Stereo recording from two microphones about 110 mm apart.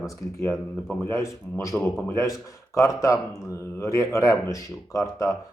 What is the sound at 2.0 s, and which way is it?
Speech, 25° left (ahead or behind).